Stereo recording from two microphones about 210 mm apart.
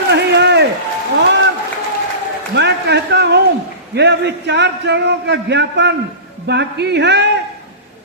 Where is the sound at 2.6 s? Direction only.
55° right (ahead or behind).